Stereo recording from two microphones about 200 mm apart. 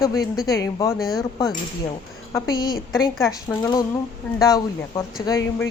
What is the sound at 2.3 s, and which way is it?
Speech, 20° left (ahead or behind).